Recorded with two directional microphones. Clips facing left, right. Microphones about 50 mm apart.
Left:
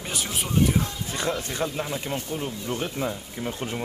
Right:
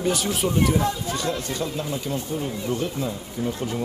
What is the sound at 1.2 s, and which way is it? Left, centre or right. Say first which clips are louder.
Speech: left 5 dB; left.